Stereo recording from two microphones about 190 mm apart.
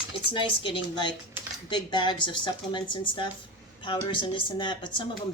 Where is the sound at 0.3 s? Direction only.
25° left (ahead or behind).